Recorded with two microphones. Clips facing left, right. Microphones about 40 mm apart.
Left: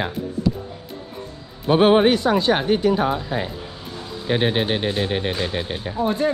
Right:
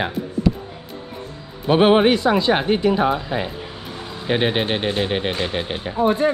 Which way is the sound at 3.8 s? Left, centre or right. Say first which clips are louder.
Right 1 dB; right.